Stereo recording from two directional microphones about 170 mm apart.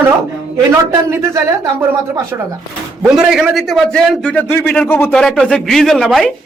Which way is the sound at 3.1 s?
5° right (ahead or behind).